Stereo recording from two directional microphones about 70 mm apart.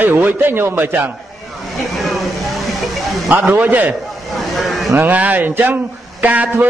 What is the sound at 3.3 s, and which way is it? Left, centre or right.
Speech, right.